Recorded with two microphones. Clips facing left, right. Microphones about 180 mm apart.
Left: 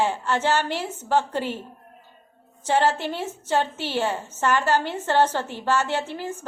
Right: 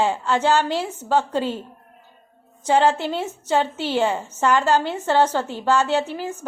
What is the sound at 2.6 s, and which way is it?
A woman's voice, 10° right (ahead or behind).